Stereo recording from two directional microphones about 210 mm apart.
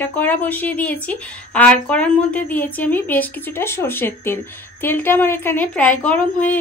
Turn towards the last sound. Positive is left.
turn(degrees=5)  # may be behind; listen again after turning